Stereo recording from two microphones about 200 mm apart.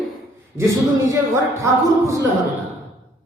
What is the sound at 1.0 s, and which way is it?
Speech, 15° right (ahead or behind).